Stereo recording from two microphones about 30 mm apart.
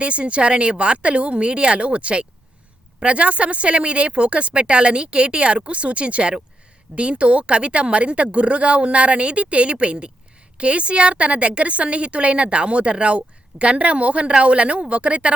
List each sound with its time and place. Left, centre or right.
0.0 s a woman's voice: right